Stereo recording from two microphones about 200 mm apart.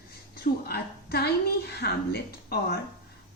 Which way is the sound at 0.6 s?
50° left (ahead or behind).